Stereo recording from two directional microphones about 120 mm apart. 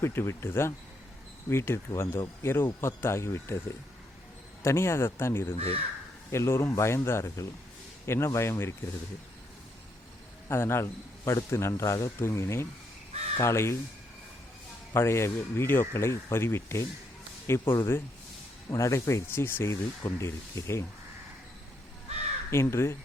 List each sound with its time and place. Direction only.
0.0 s speech: 20° left (ahead or behind)
4.6 s speech: 20° left (ahead or behind)
5.5 s speech: 55° right (ahead or behind)
6.3 s speech: 25° left (ahead or behind)
10.5 s speech: 20° left (ahead or behind)
14.9 s speech: 20° left (ahead or behind)
22.4 s speech: 20° left (ahead or behind)